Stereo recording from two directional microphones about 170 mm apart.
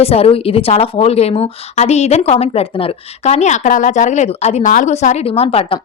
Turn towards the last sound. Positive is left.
turn(degrees=30)  # may be behind; listen again after turning